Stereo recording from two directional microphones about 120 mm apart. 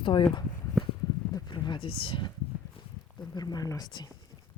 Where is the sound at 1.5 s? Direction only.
40° left (ahead or behind).